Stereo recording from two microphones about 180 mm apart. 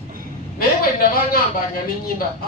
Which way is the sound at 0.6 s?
55° left (ahead or behind).